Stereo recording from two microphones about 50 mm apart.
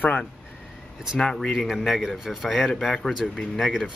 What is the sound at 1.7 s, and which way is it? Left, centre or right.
Speech, centre.